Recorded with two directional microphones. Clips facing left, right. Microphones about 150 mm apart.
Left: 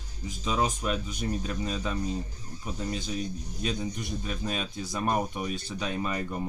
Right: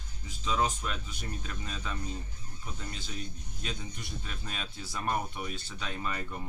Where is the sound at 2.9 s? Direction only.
15° left (ahead or behind).